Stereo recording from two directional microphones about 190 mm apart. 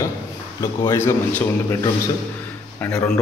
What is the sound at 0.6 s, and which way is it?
Speech, 15° left (ahead or behind).